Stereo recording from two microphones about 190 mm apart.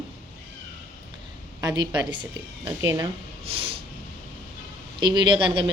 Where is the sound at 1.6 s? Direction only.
20° right (ahead or behind).